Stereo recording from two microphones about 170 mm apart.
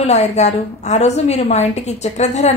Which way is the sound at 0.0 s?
40° left (ahead or behind).